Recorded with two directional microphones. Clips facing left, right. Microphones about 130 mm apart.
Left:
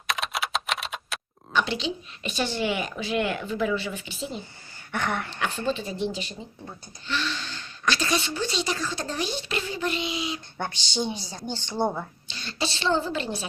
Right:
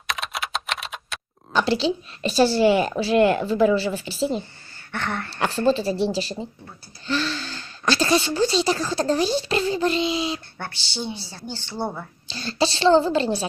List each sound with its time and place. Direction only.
0.1 s typing: centre (ahead or behind)
1.5 s a woman's voice: 35° right (ahead or behind)
4.9 s a woman's voice: 10° left (ahead or behind)
5.6 s a woman's voice: 35° right (ahead or behind)
10.6 s a woman's voice: 15° left (ahead or behind)
12.3 s a woman's voice: 35° right (ahead or behind)